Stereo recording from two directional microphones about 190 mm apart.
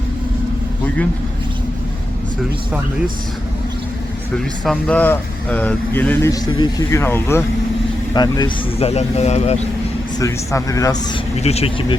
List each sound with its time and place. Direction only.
4.4 s speech: centre (ahead or behind); by 9.6 s 35° left (ahead or behind)
10.2 s speech: 15° left (ahead or behind)
11.3 s speech: 35° left (ahead or behind)